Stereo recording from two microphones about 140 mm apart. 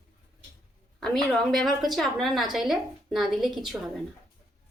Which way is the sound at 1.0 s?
5° left (ahead or behind).